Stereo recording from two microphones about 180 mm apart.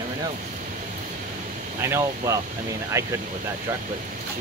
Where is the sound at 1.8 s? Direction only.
15° right (ahead or behind).